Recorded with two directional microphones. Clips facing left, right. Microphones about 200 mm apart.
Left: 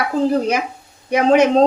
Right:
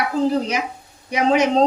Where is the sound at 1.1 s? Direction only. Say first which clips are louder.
Left 4 dB; 55° left (ahead or behind).